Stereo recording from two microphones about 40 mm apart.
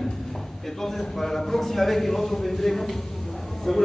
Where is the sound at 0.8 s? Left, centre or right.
Centre.